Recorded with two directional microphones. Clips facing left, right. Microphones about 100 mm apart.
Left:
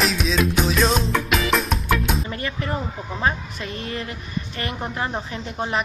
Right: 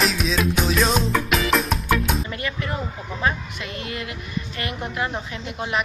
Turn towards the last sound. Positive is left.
turn(degrees=35)  # may be behind; listen again after turning